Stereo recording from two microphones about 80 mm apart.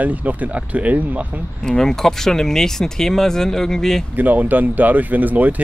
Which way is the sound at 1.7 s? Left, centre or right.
Centre.